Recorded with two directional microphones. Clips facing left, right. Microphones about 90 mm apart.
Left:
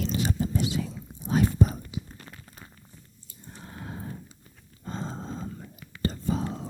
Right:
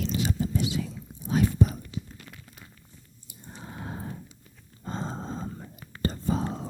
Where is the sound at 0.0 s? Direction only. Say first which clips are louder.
Even; 40° left (ahead or behind).